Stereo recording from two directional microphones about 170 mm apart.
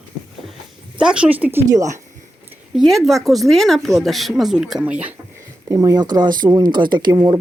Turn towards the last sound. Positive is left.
turn(degrees=-25)  # may be behind; listen again after turning